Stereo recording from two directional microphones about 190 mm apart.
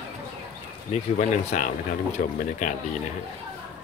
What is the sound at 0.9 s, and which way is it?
Speech, 40° left (ahead or behind).